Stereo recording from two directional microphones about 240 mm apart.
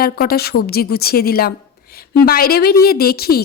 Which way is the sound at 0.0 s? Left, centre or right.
Left.